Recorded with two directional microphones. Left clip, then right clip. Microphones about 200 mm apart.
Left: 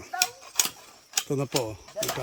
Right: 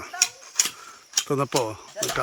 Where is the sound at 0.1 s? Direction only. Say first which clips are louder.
Right 2 dB; 25° left (ahead or behind).